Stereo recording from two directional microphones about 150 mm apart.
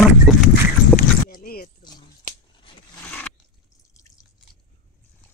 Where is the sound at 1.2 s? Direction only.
80° left.